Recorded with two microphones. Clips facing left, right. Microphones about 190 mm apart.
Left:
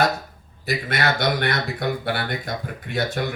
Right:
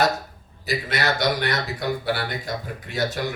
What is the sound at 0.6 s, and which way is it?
Speech, 55° left (ahead or behind).